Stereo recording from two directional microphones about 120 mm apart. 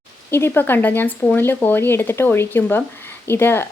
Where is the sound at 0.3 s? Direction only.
20° left (ahead or behind).